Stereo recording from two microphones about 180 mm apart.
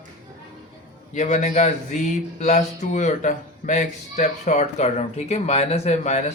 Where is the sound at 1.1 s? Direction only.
40° left (ahead or behind).